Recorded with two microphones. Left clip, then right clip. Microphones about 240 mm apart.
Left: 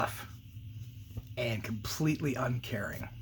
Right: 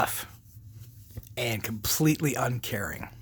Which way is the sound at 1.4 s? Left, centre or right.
Right.